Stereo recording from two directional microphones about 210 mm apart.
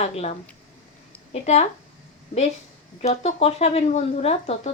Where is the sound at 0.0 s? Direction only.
30° left (ahead or behind).